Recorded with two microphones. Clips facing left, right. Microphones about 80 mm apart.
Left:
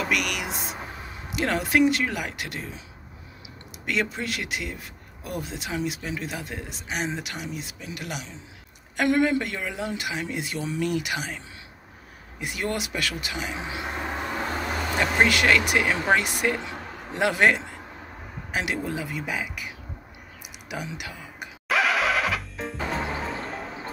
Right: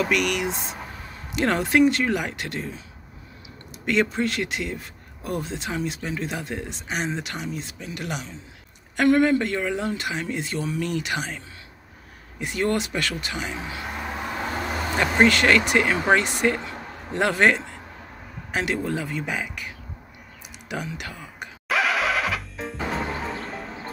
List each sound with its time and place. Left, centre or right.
0.0 s speech: centre
3.8 s speech: centre
13.6 s speech: centre
14.0 s vehicle: centre
15.2 s speech: centre
16.6 s a sound: centre
18.5 s speech: centre
20.6 s a sound: centre
21.6 s music: centre